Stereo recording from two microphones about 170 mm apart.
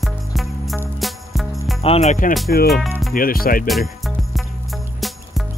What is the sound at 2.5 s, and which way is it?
Speech, 60° left (ahead or behind).